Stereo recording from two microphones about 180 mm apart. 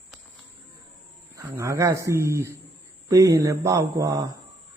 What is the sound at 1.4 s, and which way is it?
A man's voice, 15° right (ahead or behind).